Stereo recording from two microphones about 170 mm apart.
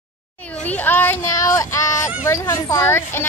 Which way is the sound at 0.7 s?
10° left (ahead or behind).